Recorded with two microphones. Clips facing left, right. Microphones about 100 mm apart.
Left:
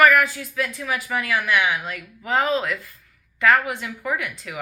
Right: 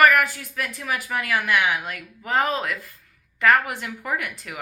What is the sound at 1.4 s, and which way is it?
Speech, 55° right (ahead or behind).